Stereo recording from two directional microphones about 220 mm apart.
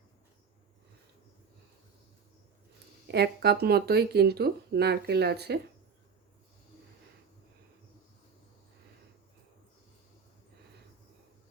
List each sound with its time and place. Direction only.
3.1 s speech: 45° right (ahead or behind)